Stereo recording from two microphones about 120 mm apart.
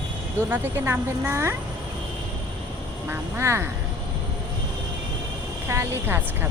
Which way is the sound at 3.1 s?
20° right (ahead or behind).